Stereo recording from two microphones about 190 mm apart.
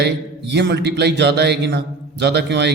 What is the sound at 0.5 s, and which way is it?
A man's voice, 65° right (ahead or behind).